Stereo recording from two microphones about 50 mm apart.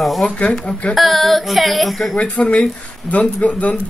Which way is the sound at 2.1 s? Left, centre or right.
Left.